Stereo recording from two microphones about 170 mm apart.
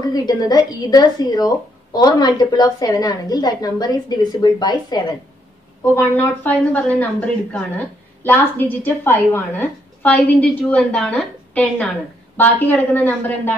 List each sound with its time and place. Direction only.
0.1 s speech: 25° left (ahead or behind)
5.9 s a woman's voice: 10° left (ahead or behind)